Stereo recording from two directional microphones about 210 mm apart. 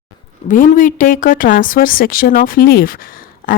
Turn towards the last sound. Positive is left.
turn(degrees=40)  # may be behind; listen again after turning